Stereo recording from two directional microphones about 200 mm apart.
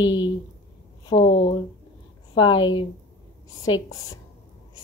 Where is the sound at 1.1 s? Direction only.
35° left (ahead or behind).